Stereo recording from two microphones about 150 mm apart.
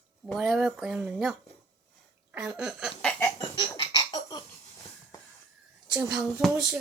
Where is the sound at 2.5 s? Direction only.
5° right (ahead or behind).